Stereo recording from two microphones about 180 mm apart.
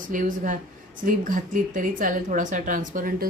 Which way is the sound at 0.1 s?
45° right (ahead or behind).